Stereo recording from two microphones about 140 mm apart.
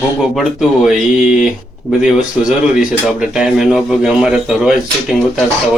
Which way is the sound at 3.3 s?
5° right (ahead or behind).